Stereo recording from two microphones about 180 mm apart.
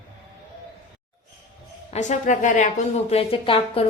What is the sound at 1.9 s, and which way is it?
A woman's voice, 40° left (ahead or behind).